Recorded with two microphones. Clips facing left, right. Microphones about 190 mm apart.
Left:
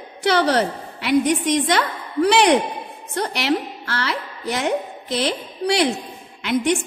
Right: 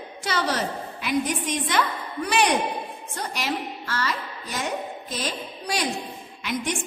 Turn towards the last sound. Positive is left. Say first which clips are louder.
# left 9 dB
turn(degrees=65)  # may be behind; listen again after turning